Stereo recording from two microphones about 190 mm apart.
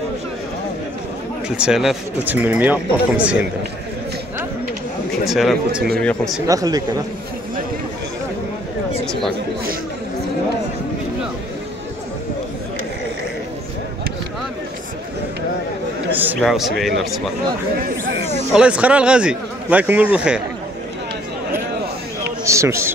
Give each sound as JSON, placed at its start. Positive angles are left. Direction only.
{"t": 1.6, "sound": "speech", "side_deg": 0}
{"t": 5.2, "sound": "a man's voice", "side_deg": 0}
{"t": 6.4, "sound": "speech", "side_deg": -20}
{"t": 16.1, "sound": "a man's voice", "side_deg": -10}
{"t": 18.5, "sound": "speech", "side_deg": -5}
{"t": 22.4, "sound": "a sound", "side_deg": -15}